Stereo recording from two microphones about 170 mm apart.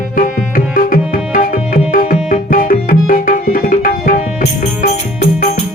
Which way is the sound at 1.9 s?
55° left (ahead or behind).